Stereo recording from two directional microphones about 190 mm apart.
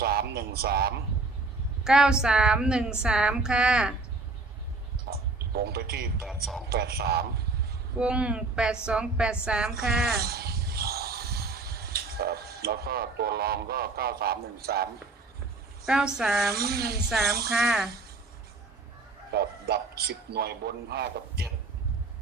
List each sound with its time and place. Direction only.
0.0 s a man's voice: 55° right (ahead or behind)
1.8 s a woman's voice: 5° right (ahead or behind)
5.1 s speech: 55° right (ahead or behind)
6.2 s a woman's voice: centre (ahead or behind)
6.7 s a man's voice: 55° right (ahead or behind)
7.9 s a woman's voice: 5° right (ahead or behind)
10.2 s a sound: 55° right (ahead or behind)
15.9 s a woman's voice: 5° right (ahead or behind)
16.6 s a man's voice: 55° right (ahead or behind)
17.1 s a woman's voice: centre (ahead or behind)
19.3 s a man's voice: 55° right (ahead or behind)